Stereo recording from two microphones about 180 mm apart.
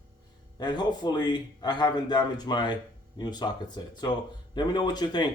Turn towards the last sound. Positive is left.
turn(degrees=25)  # may be behind; listen again after turning